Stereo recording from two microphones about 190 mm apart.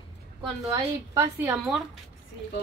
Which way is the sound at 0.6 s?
15° right (ahead or behind).